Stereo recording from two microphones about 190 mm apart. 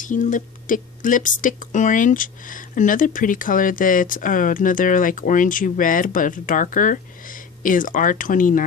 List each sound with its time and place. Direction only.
0.0 s speech: 45° left (ahead or behind)